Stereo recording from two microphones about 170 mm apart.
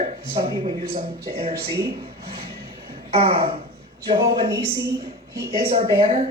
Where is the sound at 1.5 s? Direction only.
70° right (ahead or behind).